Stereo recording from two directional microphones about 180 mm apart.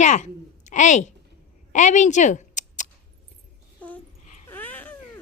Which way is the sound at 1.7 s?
45° left (ahead or behind).